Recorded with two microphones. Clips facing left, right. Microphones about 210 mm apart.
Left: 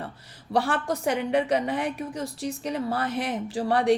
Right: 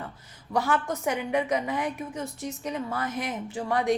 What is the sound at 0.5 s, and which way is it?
A woman's voice, 30° left (ahead or behind).